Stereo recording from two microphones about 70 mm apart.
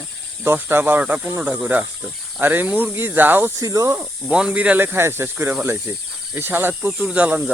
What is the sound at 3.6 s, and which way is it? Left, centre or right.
Speech, right.